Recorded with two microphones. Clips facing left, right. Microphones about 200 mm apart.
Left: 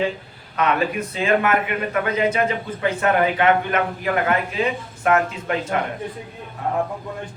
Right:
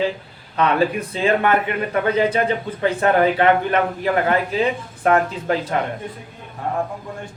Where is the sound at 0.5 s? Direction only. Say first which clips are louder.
Right 3 dB; 30° right (ahead or behind).